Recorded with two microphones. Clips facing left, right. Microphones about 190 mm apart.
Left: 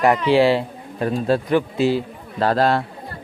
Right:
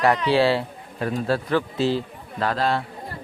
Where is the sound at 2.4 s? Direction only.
40° left (ahead or behind).